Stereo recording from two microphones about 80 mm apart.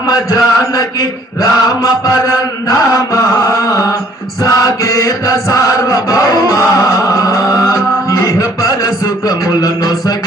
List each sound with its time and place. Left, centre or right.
0.1 s chant: left
2.6 s mantra: left
4.4 s chant: left